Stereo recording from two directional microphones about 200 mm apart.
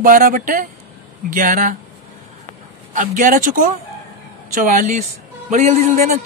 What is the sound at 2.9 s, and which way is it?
Speech, 40° right (ahead or behind).